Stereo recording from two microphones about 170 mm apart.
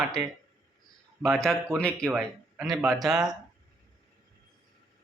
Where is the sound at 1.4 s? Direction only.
5° left (ahead or behind).